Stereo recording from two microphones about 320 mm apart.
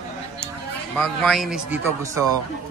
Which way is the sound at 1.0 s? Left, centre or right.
Centre.